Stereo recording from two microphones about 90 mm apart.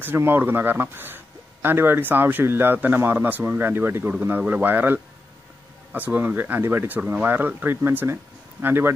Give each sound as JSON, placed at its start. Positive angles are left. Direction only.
{"t": 0.0, "sound": "speech", "side_deg": -25}